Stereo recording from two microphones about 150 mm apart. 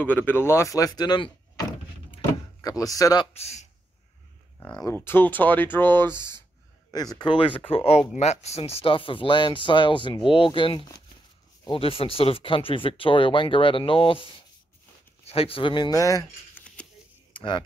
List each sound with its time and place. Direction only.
0.0 s speech: 10° left (ahead or behind)
3.3 s speech: 45° left (ahead or behind)
4.6 s speech: 25° left (ahead or behind)
6.9 s speech: 25° left (ahead or behind)
15.2 s speech: 40° left (ahead or behind); by 16.6 s 20° left (ahead or behind)
17.3 s a sound: 30° left (ahead or behind)